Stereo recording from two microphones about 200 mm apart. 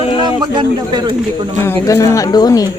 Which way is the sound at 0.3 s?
20° right (ahead or behind).